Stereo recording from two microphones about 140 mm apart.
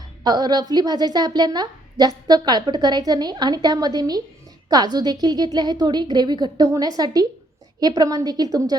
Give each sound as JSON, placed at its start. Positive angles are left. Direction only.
{"t": 0.3, "sound": "a woman's voice", "side_deg": -30}